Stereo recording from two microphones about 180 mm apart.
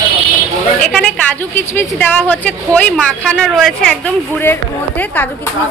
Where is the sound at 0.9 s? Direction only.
5° left (ahead or behind).